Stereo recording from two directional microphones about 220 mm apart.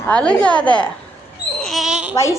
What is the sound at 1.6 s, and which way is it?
Babbling, centre (ahead or behind).